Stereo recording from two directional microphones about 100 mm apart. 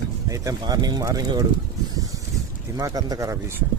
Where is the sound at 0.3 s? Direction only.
40° right (ahead or behind).